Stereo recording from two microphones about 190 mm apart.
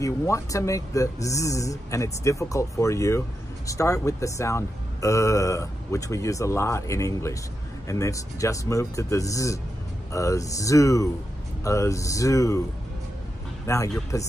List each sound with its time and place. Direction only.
0.0 s speech: 15° left (ahead or behind)
13.7 s speech: 15° left (ahead or behind)